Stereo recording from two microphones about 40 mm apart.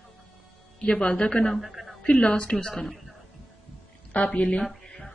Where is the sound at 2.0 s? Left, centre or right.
Left.